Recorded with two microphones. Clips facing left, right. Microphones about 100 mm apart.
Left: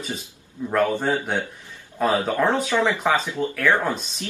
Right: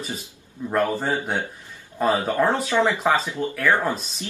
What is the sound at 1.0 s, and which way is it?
Speech, 10° right (ahead or behind).